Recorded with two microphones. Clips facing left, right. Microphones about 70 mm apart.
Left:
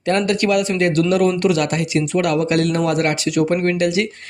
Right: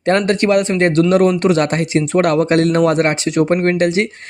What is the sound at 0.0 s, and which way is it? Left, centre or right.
Speech, right.